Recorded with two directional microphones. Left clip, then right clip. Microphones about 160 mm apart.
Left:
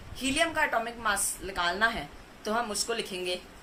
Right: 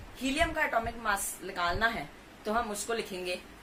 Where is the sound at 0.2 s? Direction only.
15° left (ahead or behind).